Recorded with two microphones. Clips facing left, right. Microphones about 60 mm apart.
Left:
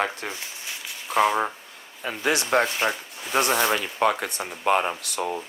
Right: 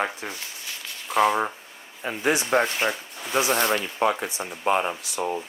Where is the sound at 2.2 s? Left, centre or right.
Left.